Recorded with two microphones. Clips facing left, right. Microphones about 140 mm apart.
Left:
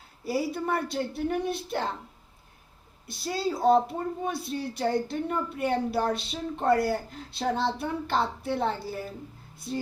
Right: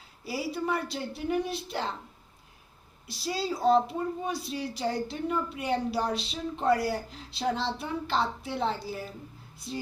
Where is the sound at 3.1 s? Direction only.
55° left (ahead or behind).